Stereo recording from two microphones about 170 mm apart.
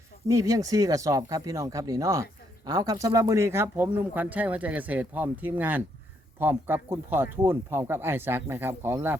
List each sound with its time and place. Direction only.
0.3 s speech: 20° right (ahead or behind)